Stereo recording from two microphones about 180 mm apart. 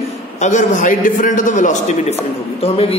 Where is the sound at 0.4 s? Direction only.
45° left (ahead or behind).